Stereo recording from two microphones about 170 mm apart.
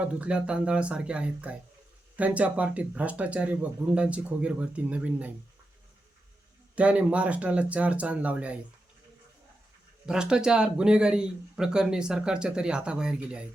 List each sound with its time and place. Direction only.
0.0 s speech: 5° right (ahead or behind)
6.7 s speech: 10° right (ahead or behind)
10.1 s speech: 5° right (ahead or behind)